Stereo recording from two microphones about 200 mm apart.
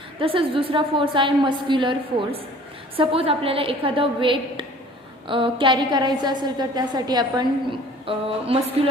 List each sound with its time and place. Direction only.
0.2 s a woman's voice: 25° right (ahead or behind)